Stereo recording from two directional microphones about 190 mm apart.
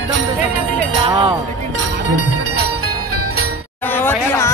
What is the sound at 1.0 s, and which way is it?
Speech, 25° right (ahead or behind).